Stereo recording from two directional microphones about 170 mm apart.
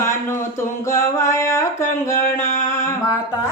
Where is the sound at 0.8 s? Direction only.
15° left (ahead or behind).